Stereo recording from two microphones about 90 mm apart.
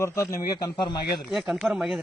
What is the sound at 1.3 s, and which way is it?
Speech, centre (ahead or behind).